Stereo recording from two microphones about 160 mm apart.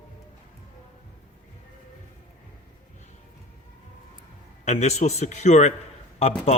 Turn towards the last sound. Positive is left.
turn(degrees=40)  # may be behind; listen again after turning